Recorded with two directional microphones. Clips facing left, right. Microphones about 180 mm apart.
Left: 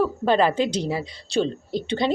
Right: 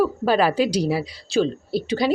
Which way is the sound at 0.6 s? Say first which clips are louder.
Right 3 dB; 25° left (ahead or behind).